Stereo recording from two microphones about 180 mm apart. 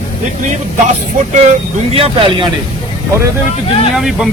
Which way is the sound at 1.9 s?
30° right (ahead or behind).